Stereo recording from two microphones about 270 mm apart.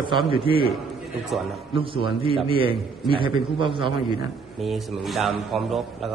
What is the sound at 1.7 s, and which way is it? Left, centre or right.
A man's voice, centre.